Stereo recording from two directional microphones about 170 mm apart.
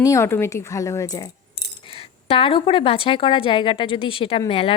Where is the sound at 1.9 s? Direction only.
30° left (ahead or behind).